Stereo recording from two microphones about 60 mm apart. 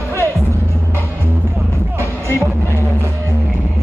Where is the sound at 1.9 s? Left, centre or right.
Right.